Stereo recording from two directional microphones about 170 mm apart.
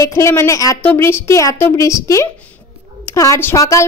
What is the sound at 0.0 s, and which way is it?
Speech, 15° left (ahead or behind).